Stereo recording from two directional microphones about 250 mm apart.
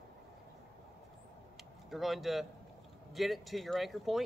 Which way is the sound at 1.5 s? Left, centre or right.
Centre.